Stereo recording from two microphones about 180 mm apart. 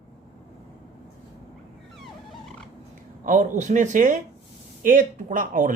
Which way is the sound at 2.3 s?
Centre (ahead or behind).